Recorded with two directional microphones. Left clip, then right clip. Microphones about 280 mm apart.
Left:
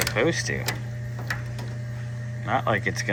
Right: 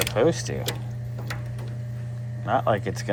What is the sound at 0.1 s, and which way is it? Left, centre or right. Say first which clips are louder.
Speech: right 1 dB; centre.